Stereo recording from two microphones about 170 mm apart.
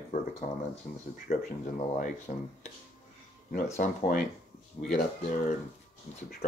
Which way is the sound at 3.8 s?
45° left (ahead or behind).